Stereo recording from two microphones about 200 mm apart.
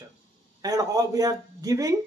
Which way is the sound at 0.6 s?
20° right (ahead or behind).